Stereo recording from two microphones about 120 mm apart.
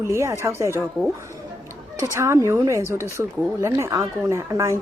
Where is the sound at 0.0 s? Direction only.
25° right (ahead or behind).